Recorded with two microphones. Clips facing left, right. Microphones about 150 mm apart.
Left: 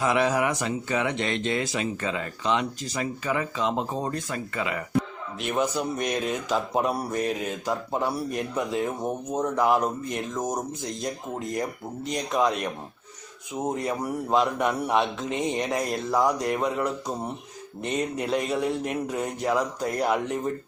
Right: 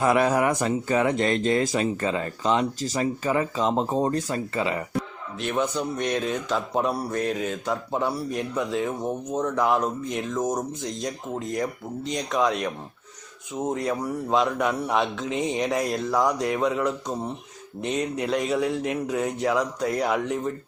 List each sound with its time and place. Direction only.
0.0 s speech: 45° right (ahead or behind); by 4.8 s 30° right (ahead or behind)
5.4 s speech: 5° left (ahead or behind)